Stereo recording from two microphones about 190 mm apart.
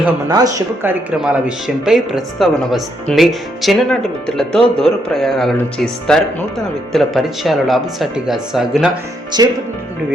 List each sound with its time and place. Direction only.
0.3 s speech: 20° right (ahead or behind); by 8.9 s centre (ahead or behind)
9.4 s speech: 20° right (ahead or behind)